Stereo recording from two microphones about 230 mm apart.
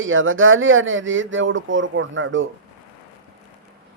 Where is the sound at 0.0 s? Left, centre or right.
Right.